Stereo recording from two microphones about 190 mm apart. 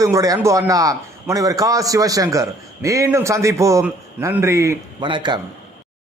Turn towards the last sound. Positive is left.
turn(degrees=-25)  # may be behind; listen again after turning